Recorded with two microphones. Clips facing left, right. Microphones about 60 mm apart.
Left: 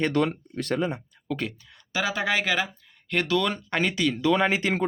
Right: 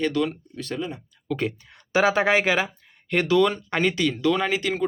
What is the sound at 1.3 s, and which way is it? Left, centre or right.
Speech, centre.